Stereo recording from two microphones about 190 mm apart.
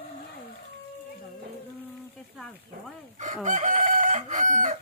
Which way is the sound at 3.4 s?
40° right (ahead or behind).